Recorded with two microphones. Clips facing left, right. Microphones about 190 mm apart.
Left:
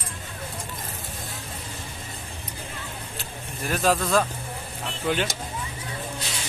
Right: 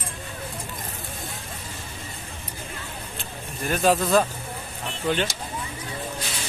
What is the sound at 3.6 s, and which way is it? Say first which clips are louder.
Speech: right 2 dB; centre (ahead or behind).